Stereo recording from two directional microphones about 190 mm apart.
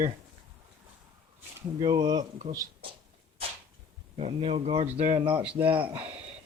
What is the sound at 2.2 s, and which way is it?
Speech, 40° right (ahead or behind).